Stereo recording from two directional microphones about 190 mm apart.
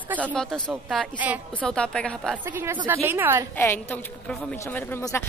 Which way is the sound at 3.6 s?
10° left (ahead or behind).